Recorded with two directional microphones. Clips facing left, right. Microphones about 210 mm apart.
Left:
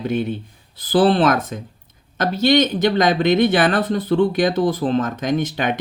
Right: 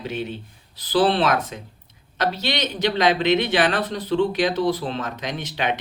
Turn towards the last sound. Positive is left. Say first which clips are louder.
# left 6 dB
turn(degrees=45)  # may be behind; listen again after turning